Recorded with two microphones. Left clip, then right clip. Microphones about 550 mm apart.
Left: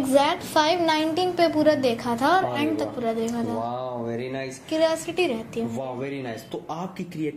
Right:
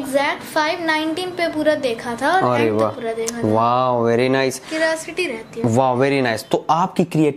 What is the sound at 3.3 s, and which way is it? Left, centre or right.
Speech, right.